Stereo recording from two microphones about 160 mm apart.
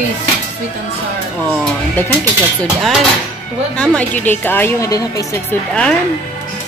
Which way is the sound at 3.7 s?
10° left (ahead or behind).